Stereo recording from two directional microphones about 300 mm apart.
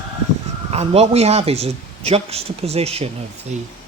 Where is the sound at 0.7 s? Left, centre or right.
Centre.